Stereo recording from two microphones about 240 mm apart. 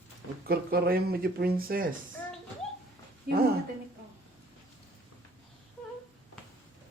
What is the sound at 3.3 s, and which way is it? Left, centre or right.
Speech, right.